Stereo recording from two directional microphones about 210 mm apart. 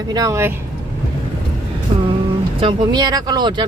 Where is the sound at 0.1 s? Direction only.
15° right (ahead or behind).